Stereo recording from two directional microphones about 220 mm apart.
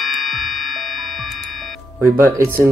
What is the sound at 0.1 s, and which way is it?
Music, centre (ahead or behind).